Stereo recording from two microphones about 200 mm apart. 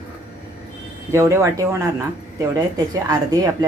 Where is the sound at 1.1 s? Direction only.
15° right (ahead or behind).